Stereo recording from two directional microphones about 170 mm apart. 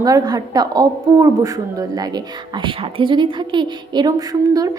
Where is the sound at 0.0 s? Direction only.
20° right (ahead or behind).